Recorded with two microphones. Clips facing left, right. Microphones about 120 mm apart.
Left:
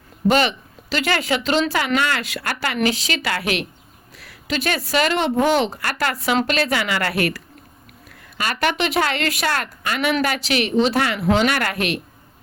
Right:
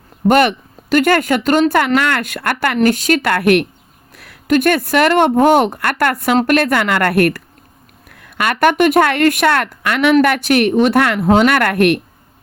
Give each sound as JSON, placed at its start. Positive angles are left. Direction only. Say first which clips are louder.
{"t": 0.3, "sound": "speech", "louder": "right 6 dB", "side_deg": -55}